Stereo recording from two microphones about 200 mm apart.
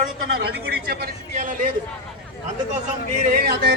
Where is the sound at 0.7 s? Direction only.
50° right (ahead or behind).